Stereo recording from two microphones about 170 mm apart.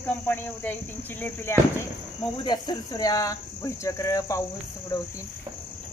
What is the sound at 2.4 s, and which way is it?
Cricket, 25° left (ahead or behind).